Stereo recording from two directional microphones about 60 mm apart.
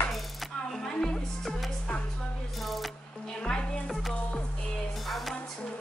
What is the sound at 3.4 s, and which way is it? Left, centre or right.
Music, centre.